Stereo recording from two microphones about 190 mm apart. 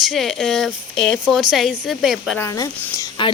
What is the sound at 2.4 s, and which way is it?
Speech, 15° left (ahead or behind).